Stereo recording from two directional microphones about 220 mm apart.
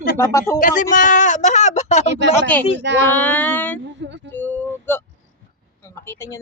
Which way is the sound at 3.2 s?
5° left (ahead or behind).